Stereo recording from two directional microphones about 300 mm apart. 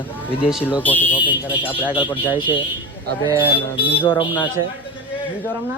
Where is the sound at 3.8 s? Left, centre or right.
Centre.